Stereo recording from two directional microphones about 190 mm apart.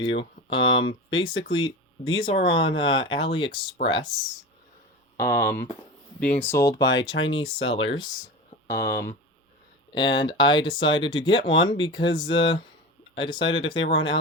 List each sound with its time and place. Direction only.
0.0 s speech: 25° left (ahead or behind)
5.1 s speech: 15° left (ahead or behind)